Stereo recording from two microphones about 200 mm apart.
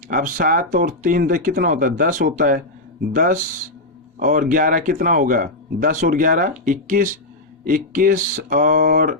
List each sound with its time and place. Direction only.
0.1 s speech: 45° right (ahead or behind)